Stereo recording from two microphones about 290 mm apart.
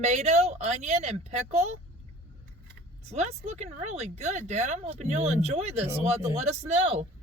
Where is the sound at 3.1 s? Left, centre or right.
Right.